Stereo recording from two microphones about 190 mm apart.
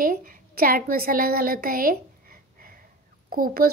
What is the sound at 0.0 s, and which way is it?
A woman's voice, 45° right (ahead or behind).